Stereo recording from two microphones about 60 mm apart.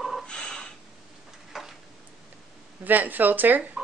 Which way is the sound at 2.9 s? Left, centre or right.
Right.